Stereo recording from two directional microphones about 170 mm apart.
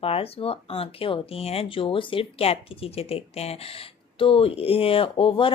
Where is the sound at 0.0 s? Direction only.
35° left (ahead or behind).